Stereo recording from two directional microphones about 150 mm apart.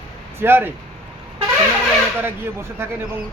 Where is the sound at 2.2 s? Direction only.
15° right (ahead or behind).